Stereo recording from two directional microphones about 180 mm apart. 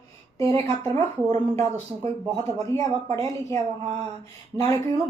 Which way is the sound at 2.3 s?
15° left (ahead or behind).